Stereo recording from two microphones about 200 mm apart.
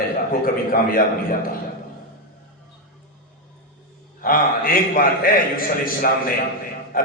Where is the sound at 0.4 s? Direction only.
45° left (ahead or behind).